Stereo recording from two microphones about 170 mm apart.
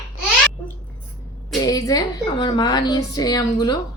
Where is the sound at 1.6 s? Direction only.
20° left (ahead or behind).